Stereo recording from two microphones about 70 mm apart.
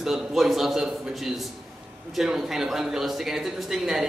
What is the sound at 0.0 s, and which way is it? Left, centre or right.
A man's voice, centre.